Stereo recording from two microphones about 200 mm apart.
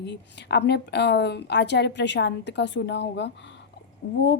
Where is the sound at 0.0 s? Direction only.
60° left (ahead or behind).